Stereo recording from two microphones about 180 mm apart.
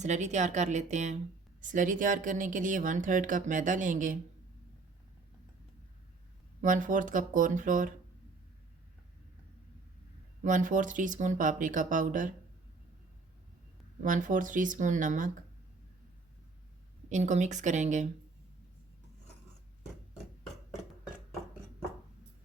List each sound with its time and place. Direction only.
0.0 s a woman's voice: 40° right (ahead or behind)
6.6 s speech: 45° right (ahead or behind)
10.4 s speech: 45° right (ahead or behind)
14.0 s speech: 45° right (ahead or behind)
17.1 s a woman's voice: 40° right (ahead or behind)